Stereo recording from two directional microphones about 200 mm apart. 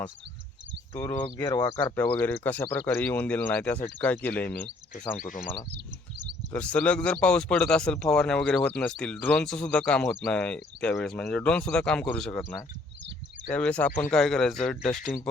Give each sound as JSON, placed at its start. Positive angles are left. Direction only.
{"t": 0.9, "sound": "speech", "side_deg": 15}
{"t": 2.0, "sound": "speech", "side_deg": 10}
{"t": 4.9, "sound": "speech", "side_deg": 40}
{"t": 6.5, "sound": "a man's voice", "side_deg": 5}
{"t": 13.6, "sound": "a man's voice", "side_deg": 5}